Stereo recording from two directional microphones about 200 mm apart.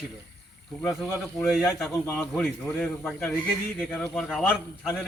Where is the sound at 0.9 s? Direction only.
Centre (ahead or behind).